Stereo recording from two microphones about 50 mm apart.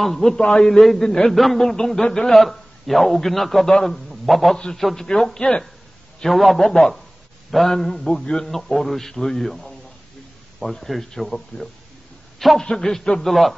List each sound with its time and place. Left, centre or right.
0.0 s a man's voice: centre
6.3 s a man's voice: centre
13.3 s a man's voice: centre